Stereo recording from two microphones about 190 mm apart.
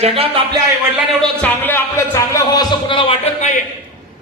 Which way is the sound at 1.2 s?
10° left (ahead or behind).